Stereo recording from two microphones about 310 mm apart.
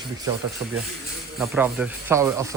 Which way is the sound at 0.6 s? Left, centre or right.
Centre.